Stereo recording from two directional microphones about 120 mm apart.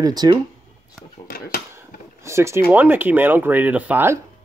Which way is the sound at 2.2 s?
25° right (ahead or behind).